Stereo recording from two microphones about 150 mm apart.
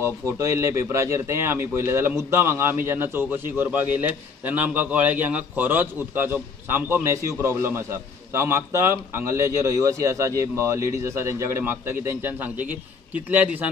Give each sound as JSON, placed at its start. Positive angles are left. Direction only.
{"t": 0.0, "sound": "a man's voice", "side_deg": -20}